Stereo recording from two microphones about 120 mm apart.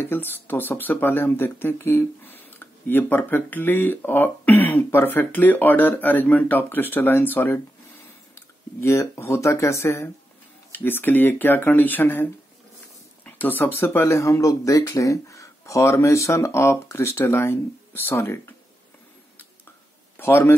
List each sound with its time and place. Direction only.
0.0 s speech: 15° left (ahead or behind)
20.2 s a man's voice: 20° left (ahead or behind)